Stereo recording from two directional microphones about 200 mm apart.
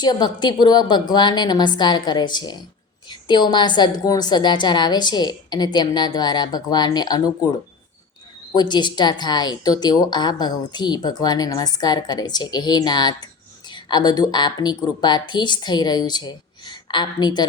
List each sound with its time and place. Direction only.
0.0 s a woman's voice: 20° left (ahead or behind)
8.5 s a woman's voice: 20° left (ahead or behind)